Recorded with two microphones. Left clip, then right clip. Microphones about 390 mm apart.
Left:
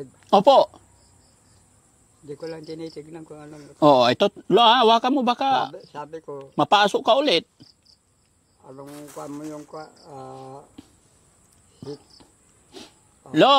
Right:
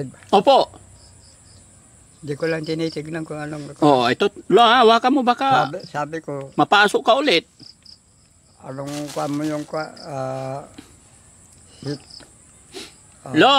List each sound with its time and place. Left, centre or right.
0.3 s speech: left
2.2 s speech: right
3.8 s speech: left
4.5 s speech: centre
5.7 s speech: right
6.5 s speech: centre
8.6 s speech: right
13.3 s speech: centre